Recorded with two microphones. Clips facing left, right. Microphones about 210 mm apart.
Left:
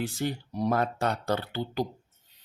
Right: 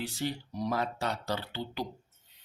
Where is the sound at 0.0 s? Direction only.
50° left (ahead or behind).